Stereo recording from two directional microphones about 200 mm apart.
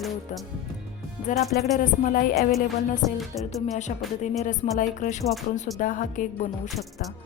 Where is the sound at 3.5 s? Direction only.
35° left (ahead or behind).